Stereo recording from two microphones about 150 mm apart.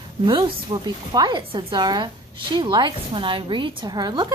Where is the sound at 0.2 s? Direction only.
30° right (ahead or behind).